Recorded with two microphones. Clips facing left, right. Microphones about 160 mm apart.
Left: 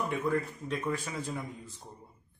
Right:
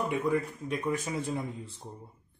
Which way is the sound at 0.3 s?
15° right (ahead or behind).